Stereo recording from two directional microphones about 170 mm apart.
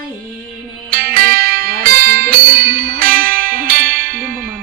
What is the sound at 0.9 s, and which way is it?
Music, 60° right (ahead or behind).